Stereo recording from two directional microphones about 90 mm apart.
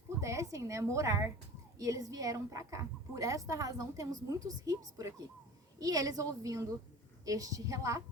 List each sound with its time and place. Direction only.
0.2 s speech: 35° right (ahead or behind)